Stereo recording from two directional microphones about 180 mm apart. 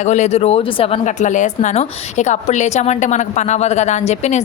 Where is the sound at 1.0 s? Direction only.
45° left (ahead or behind).